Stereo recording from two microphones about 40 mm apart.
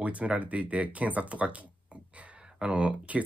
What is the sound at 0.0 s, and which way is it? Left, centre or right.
Speech, right.